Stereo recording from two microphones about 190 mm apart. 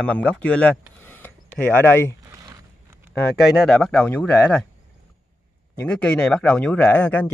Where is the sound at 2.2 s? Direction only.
20° right (ahead or behind).